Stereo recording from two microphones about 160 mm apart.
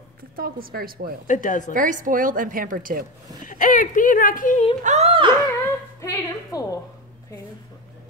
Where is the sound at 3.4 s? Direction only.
55° left (ahead or behind).